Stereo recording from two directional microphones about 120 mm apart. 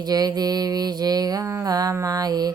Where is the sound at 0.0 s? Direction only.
30° right (ahead or behind).